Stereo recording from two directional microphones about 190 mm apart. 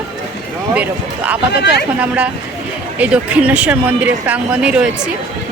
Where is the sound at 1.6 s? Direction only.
60° left (ahead or behind).